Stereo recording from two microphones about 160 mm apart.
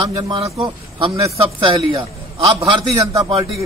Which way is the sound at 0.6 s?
35° right (ahead or behind).